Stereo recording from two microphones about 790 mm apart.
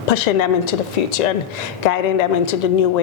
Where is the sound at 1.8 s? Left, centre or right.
Left.